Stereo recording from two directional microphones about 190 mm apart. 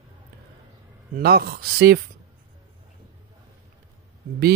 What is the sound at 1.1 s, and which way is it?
Speech, 55° right (ahead or behind).